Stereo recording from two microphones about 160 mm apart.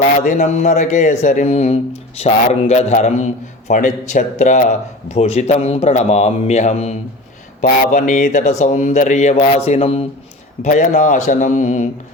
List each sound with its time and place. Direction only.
0.2 s a man's voice: 45° left (ahead or behind)
10.6 s a man's voice: 50° left (ahead or behind)